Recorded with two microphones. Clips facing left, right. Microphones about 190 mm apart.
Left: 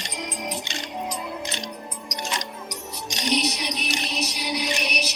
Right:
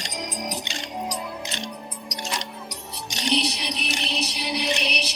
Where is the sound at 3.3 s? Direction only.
30° right (ahead or behind).